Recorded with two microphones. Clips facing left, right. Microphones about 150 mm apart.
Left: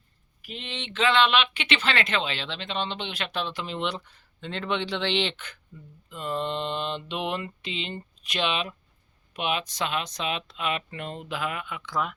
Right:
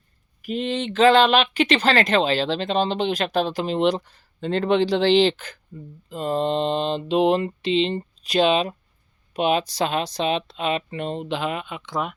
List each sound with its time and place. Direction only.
0.4 s speech: 45° right (ahead or behind); by 12.1 s 20° right (ahead or behind)